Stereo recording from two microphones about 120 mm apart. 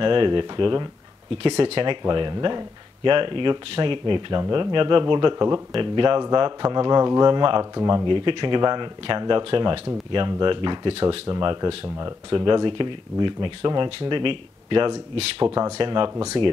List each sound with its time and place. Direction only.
0.0 s speech: 45° right (ahead or behind)
11.2 s speech: 35° right (ahead or behind)
15.4 s speech: 30° right (ahead or behind)
15.8 s speech: 40° right (ahead or behind)